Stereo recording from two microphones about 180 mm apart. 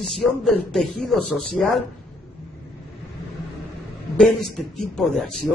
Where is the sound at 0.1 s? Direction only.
Centre (ahead or behind).